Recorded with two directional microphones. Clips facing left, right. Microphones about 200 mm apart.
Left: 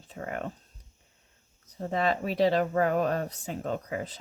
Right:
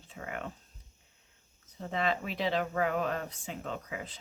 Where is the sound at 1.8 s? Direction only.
40° left (ahead or behind).